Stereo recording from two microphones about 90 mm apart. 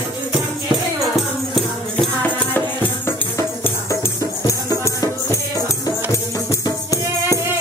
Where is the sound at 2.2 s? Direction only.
20° left (ahead or behind).